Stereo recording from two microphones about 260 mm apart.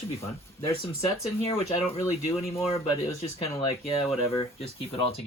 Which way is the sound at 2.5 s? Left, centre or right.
Left.